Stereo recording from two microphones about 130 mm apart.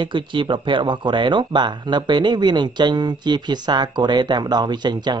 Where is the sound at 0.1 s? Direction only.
40° right (ahead or behind).